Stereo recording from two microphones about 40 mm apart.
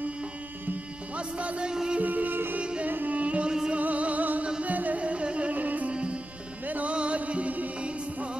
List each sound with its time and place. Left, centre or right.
1.1 s music: right
1.7 s music: centre
2.0 s music: right
2.6 s music: right
3.4 s music: centre
3.7 s music: right
5.5 s music: right